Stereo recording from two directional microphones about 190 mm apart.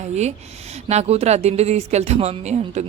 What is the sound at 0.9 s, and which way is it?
Speech, 35° right (ahead or behind).